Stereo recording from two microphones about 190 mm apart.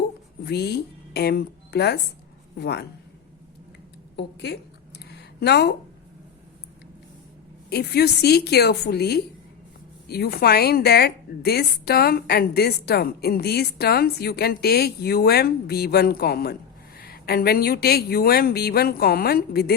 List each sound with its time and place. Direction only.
0.4 s a woman's voice: 60° left (ahead or behind)
4.2 s a woman's voice: 60° left (ahead or behind)
4.9 s a sound: 60° left (ahead or behind)
7.7 s a woman's voice: 60° left (ahead or behind)